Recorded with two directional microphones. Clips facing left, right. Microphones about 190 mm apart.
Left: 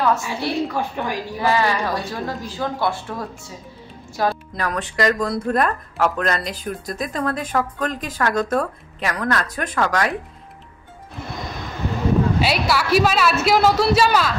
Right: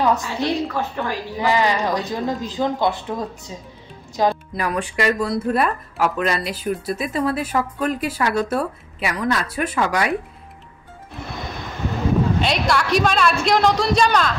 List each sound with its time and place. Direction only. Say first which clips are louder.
0.0 s a woman's voice: right 1 dB; 20° right (ahead or behind)
0.7 s speech: even; 15° left (ahead or behind)
1.4 s speech: right 1 dB; 15° right (ahead or behind)
12.4 s a woman's voice: even; 5° left (ahead or behind)